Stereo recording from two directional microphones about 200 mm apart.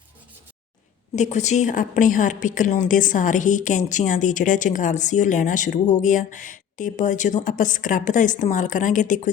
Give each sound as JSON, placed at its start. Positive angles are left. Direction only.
{"t": 1.1, "sound": "a woman's voice", "side_deg": 35}